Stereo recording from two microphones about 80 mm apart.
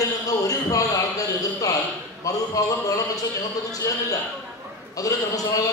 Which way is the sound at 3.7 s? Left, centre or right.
Left.